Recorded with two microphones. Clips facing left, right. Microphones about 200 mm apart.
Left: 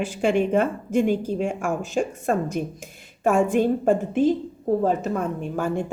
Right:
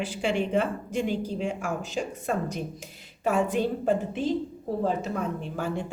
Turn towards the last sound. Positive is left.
turn(degrees=50)  # may be behind; listen again after turning